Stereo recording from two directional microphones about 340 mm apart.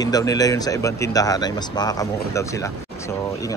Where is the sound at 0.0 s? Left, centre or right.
Centre.